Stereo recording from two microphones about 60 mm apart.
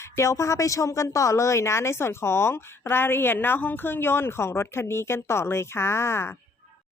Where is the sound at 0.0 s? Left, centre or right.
Left.